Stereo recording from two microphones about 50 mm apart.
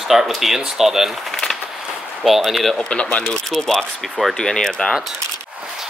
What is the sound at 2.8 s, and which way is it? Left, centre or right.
Speech, left.